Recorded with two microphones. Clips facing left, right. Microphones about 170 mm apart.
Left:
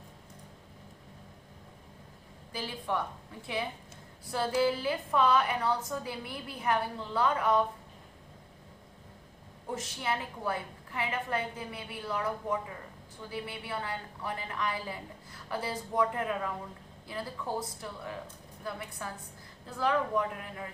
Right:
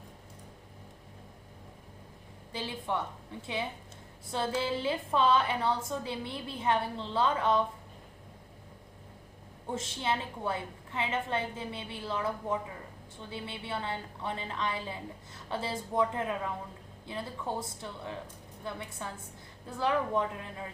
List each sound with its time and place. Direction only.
2.5 s a woman's voice: 25° right (ahead or behind)
9.7 s a woman's voice: 25° right (ahead or behind)